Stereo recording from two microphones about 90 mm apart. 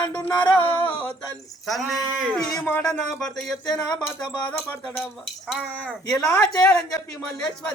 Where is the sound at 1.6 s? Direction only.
Centre (ahead or behind).